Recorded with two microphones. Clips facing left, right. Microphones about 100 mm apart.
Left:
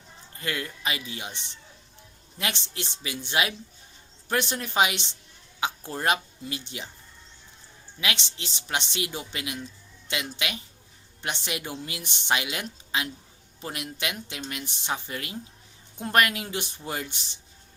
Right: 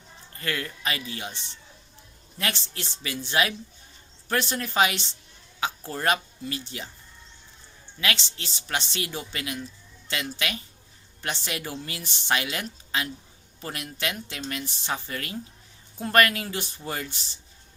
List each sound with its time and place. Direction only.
0.3 s speech: 15° left (ahead or behind)
2.4 s speech: 20° left (ahead or behind)
8.0 s speech: 20° left (ahead or behind)